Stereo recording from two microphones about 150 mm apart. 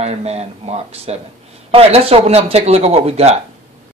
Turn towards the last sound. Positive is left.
turn(degrees=-45)  # may be behind; listen again after turning